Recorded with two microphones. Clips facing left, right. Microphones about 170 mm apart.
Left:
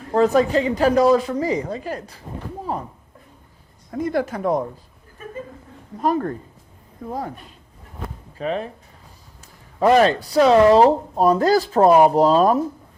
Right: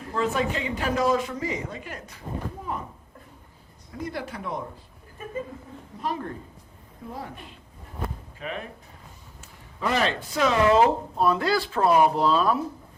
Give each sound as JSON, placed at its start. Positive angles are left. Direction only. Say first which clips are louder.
{"t": 0.1, "sound": "speech", "louder": "left 10 dB", "side_deg": 40}
{"t": 4.0, "sound": "speech", "louder": "left 11 dB", "side_deg": 50}
{"t": 6.0, "sound": "speech", "louder": "left 10 dB", "side_deg": 50}
{"t": 9.8, "sound": "speech", "louder": "left 10 dB", "side_deg": 45}